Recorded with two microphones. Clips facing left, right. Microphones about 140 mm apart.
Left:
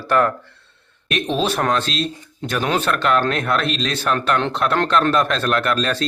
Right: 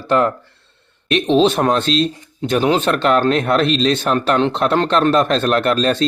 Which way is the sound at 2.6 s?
15° right (ahead or behind).